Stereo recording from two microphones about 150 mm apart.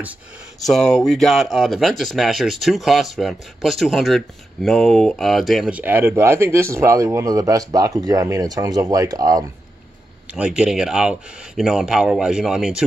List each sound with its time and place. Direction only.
0.7 s speech: 5° left (ahead or behind); by 9.4 s 25° right (ahead or behind)
10.3 s speech: 5° right (ahead or behind)